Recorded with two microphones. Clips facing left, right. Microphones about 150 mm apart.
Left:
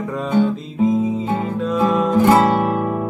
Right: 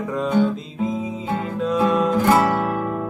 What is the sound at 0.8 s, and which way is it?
Music, centre (ahead or behind).